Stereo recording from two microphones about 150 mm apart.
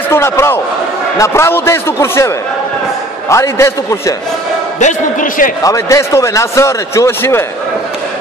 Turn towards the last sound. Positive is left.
turn(degrees=15)  # may be behind; listen again after turning